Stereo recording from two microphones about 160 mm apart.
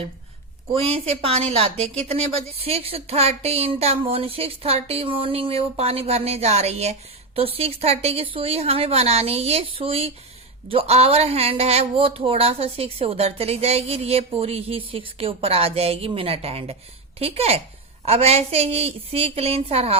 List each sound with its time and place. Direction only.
0.7 s speech: 35° right (ahead or behind)